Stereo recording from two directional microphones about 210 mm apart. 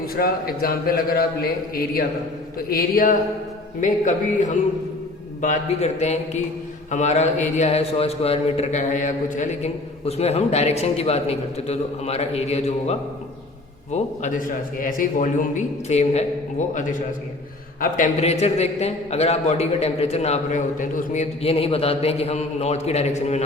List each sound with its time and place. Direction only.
0.1 s a man's voice: 45° left (ahead or behind)